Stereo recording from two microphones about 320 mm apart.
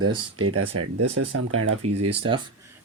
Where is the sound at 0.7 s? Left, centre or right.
Right.